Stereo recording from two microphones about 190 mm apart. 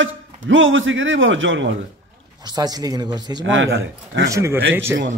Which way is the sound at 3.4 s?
75° right (ahead or behind).